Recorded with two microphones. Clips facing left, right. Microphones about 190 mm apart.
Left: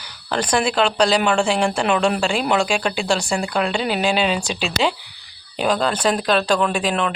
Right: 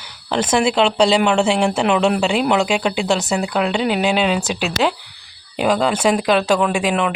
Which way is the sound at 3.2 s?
5° right (ahead or behind).